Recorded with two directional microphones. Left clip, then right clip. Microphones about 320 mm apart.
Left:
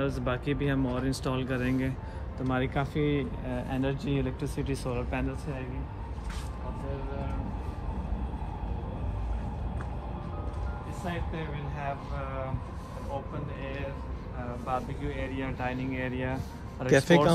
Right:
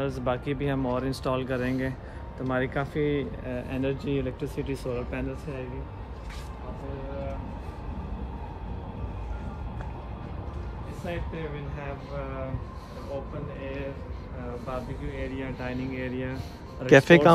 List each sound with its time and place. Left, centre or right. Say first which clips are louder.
0.0 s speech: right 2 dB; right; by 5.2 s centre
11.1 s speech: right 2 dB; centre
13.6 s speech: right 3 dB; centre
16.8 s speech: right 6 dB; right